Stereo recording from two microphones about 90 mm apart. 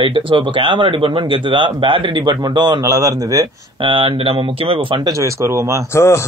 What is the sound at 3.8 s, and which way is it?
Speech, 75° right (ahead or behind).